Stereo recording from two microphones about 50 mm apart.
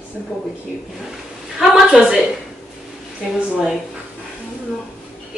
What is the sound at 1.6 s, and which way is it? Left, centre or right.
Speech, centre.